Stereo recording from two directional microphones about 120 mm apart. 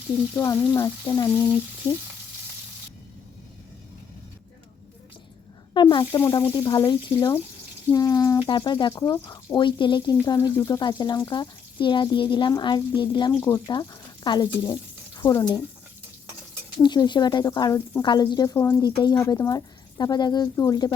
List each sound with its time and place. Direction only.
0.3 s speech: 25° left (ahead or behind)
1.3 s sizzle: 15° left (ahead or behind)
5.7 s speech: 40° left (ahead or behind)
6.1 s speech: 25° left (ahead or behind); by 13.3 s 40° left (ahead or behind)
13.3 s speech: 25° left (ahead or behind)
14.3 s speech: 40° left (ahead or behind)
16.8 s speech: 35° left (ahead or behind)